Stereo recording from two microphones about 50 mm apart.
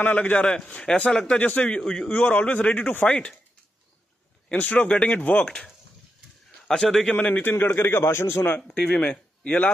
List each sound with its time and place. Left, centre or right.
0.0 s a man's voice: left
0.4 s a man's voice: left
1.4 s a man's voice: left
1.8 s a man's voice: centre; by 3.1 s left
3.1 s a man's voice: left
4.5 s a man's voice: left
6.9 s a man's voice: centre
7.4 s a man's voice: left
8.7 s a man's voice: left